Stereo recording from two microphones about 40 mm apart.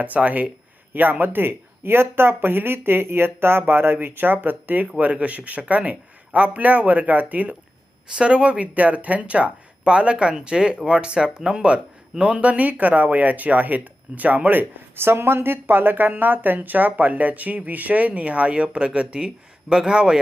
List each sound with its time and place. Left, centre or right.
0.0 s speech: right
5.1 s speech: right
8.1 s speech: right
15.0 s speech: right